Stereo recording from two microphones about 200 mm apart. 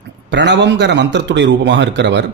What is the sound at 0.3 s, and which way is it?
Speech, 65° right (ahead or behind).